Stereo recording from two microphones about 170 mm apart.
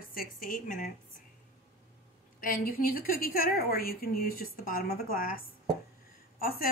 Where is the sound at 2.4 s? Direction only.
55° left (ahead or behind).